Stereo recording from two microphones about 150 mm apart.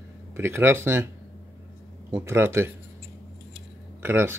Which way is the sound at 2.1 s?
15° right (ahead or behind).